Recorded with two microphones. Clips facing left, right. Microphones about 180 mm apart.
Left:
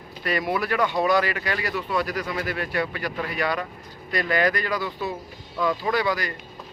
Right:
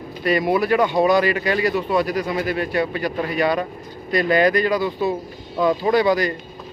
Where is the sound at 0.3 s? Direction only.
20° right (ahead or behind).